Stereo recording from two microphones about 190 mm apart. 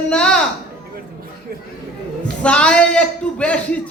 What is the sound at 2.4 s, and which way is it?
A man's voice, 5° left (ahead or behind).